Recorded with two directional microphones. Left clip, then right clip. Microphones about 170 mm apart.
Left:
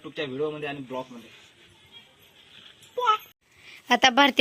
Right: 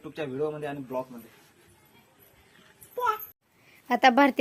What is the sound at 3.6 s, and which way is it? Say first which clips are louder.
Speech: left 1 dB; 5° right (ahead or behind).